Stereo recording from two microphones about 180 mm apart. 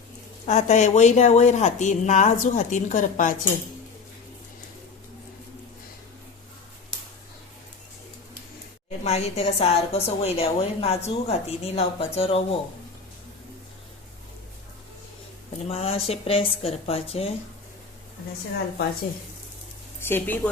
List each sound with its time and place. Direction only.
0.4 s a woman's voice: 40° left (ahead or behind)
9.0 s a woman's voice: 35° left (ahead or behind)
15.7 s a woman's voice: 35° left (ahead or behind)
20.0 s a woman's voice: 10° left (ahead or behind)